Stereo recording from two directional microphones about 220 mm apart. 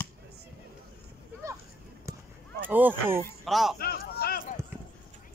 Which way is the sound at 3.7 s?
45° left (ahead or behind).